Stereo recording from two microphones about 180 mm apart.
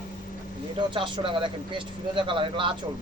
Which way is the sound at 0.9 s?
25° right (ahead or behind).